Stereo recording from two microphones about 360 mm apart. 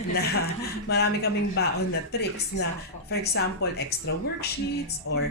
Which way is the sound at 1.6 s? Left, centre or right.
Left.